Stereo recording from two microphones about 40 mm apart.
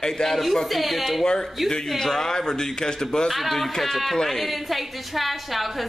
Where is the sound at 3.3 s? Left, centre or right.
Centre.